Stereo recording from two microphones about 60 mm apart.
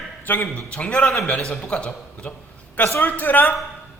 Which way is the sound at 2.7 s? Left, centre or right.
Left.